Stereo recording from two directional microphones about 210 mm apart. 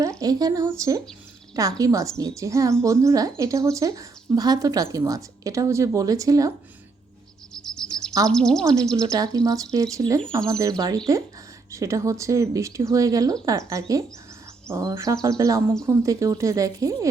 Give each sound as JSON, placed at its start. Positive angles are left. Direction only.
{"t": 0.2, "sound": "speech", "side_deg": -20}
{"t": 7.5, "sound": "insect", "side_deg": 5}
{"t": 8.3, "sound": "speech", "side_deg": 5}
{"t": 9.0, "sound": "speech", "side_deg": -15}